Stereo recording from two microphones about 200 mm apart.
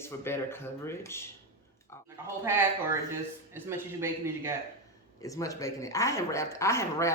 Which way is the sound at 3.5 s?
10° right (ahead or behind).